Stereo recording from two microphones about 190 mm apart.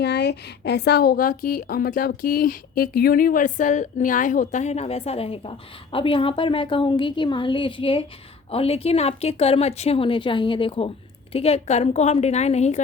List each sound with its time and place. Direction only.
0.0 s a woman's voice: 60° left (ahead or behind); by 12.8 s 35° left (ahead or behind)